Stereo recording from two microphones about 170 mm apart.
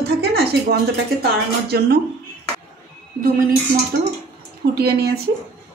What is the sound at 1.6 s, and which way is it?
Speech, 70° right (ahead or behind).